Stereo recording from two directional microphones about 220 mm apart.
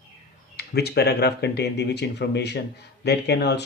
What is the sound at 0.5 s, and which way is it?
Speech, 45° left (ahead or behind).